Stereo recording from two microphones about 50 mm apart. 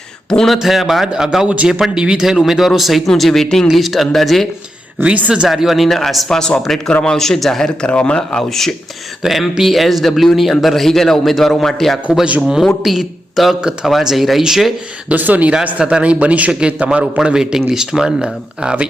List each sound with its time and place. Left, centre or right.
0.3 s speech: centre
0.5 s a man's voice: centre
2.4 s a man's voice: centre
5.0 s a man's voice: right
5.5 s a man's voice: centre
6.2 s a man's voice: centre
7.8 s speech: left
9.2 s a man's voice: centre
15.1 s speech: right
15.8 s a man's voice: centre